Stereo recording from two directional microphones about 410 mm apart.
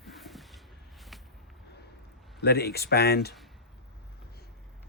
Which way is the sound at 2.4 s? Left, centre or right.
Left.